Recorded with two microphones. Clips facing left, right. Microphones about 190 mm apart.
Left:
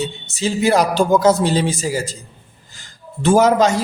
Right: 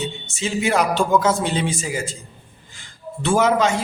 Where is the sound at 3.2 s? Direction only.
40° left (ahead or behind).